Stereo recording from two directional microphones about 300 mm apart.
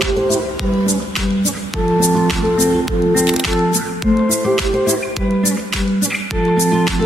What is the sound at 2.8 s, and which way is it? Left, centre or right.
Music, centre.